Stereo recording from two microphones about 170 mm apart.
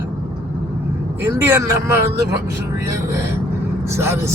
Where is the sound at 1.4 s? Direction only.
15° right (ahead or behind).